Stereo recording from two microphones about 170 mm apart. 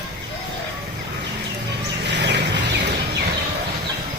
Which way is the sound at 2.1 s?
85° right.